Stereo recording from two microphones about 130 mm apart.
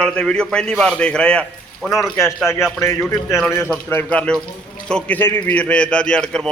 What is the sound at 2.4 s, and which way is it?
Speech, 20° left (ahead or behind).